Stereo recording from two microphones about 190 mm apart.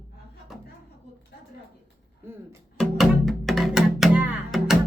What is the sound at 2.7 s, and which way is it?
Music, centre (ahead or behind).